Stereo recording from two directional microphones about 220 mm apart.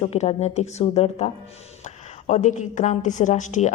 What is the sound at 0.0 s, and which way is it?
A woman's voice, 25° left (ahead or behind).